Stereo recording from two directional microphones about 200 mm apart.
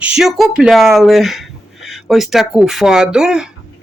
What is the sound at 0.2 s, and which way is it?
Speech, centre (ahead or behind).